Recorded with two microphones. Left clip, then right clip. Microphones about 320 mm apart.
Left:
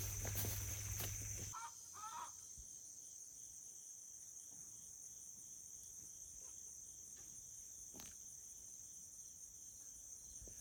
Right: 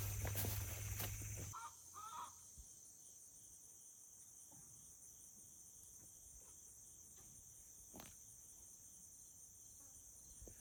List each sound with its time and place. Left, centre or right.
0.0 s music: centre
1.5 s crow: left